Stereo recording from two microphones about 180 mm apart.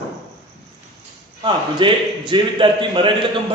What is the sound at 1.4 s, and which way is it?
A man's voice, 25° right (ahead or behind).